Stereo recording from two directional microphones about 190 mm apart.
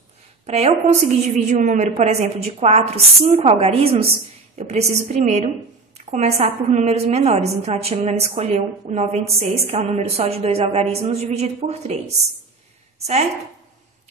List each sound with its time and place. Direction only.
0.5 s a woman's voice: 35° right (ahead or behind)